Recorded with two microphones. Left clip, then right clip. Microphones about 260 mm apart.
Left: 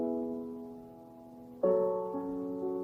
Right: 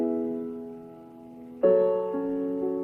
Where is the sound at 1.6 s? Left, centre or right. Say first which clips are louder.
Right 7 dB; right.